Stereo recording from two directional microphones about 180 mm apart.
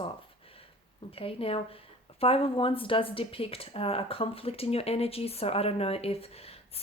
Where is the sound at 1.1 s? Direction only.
30° left (ahead or behind).